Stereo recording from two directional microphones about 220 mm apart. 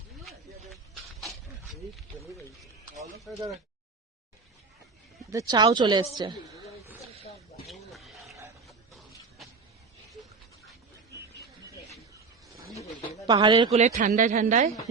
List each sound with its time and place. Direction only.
3.3 s speech: centre (ahead or behind)
5.3 s speech: 15° right (ahead or behind)
7.7 s wild animals: centre (ahead or behind)
8.6 s a sound: centre (ahead or behind)
13.2 s speech: 20° right (ahead or behind)